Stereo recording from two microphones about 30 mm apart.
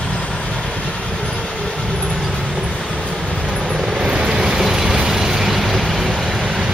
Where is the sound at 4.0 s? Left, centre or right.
Right; by 6.0 s centre.